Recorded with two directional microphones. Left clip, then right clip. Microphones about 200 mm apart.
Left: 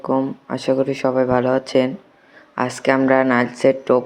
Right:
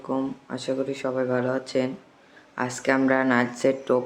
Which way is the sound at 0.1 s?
25° left (ahead or behind).